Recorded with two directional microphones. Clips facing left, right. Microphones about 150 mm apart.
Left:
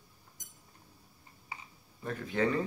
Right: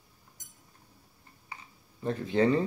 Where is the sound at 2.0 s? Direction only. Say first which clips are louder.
Right 5 dB; 30° right (ahead or behind).